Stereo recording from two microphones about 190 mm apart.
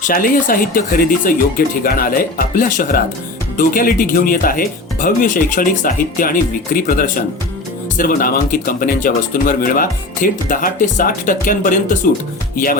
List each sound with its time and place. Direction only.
0.1 s speech: 45° left (ahead or behind)